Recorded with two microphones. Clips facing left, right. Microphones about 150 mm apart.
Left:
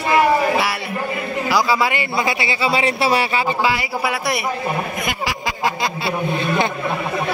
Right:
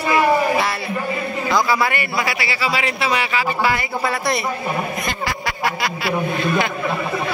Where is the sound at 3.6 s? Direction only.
10° left (ahead or behind).